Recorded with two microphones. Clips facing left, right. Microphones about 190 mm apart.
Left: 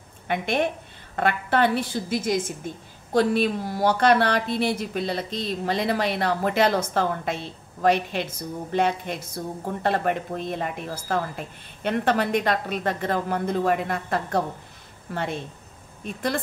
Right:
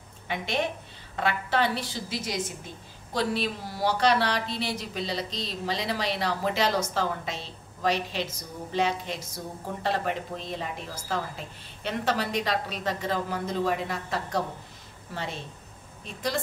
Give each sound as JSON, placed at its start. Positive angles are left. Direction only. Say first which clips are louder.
{"t": 0.3, "sound": "a woman's voice", "louder": "left 5 dB", "side_deg": 55}